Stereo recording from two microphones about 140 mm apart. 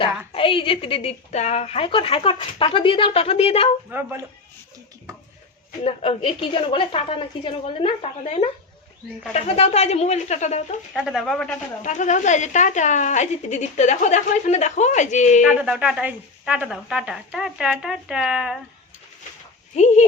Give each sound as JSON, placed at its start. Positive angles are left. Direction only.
{"t": 0.3, "sound": "a woman's voice", "side_deg": 40}
{"t": 3.9, "sound": "speech", "side_deg": -15}
{"t": 5.8, "sound": "a woman's voice", "side_deg": 45}
{"t": 10.9, "sound": "speech", "side_deg": 0}
{"t": 11.8, "sound": "a woman's voice", "side_deg": 60}
{"t": 15.6, "sound": "speech", "side_deg": -5}
{"t": 19.7, "sound": "a woman's voice", "side_deg": 55}